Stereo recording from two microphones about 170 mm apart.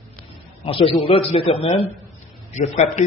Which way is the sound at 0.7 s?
35° left (ahead or behind).